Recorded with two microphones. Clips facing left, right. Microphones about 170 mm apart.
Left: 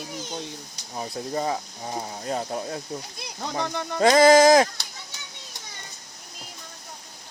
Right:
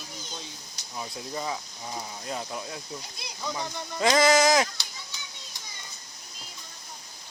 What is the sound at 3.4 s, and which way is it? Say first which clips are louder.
Speech: left 5 dB; 60° left (ahead or behind).